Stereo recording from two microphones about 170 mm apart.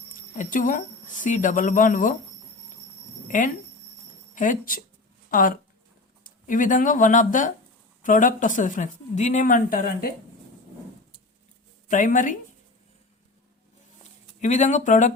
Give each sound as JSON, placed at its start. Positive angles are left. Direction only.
{"t": 0.3, "sound": "speech", "side_deg": 50}
{"t": 3.2, "sound": "speech", "side_deg": 50}
{"t": 11.9, "sound": "speech", "side_deg": 50}
{"t": 14.4, "sound": "speech", "side_deg": 45}